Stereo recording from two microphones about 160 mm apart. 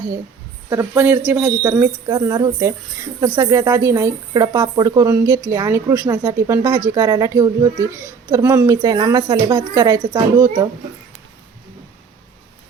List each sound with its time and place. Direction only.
0.7 s speech: 15° right (ahead or behind)